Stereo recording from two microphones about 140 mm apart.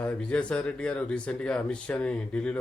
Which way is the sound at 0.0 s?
10° left (ahead or behind).